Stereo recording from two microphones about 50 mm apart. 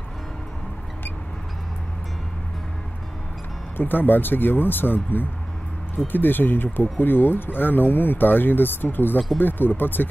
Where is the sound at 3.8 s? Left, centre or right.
Left.